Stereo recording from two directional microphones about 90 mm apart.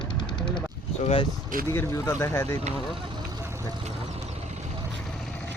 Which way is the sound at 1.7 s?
30° left (ahead or behind).